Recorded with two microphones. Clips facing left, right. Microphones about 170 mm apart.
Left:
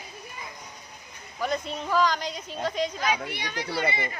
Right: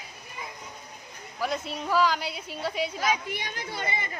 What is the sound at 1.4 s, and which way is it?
A woman's voice, 5° right (ahead or behind).